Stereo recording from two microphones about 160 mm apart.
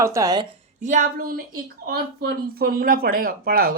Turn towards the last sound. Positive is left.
turn(degrees=-65)  # may be behind; listen again after turning